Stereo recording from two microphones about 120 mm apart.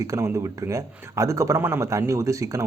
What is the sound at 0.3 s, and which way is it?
A man's voice, 25° right (ahead or behind).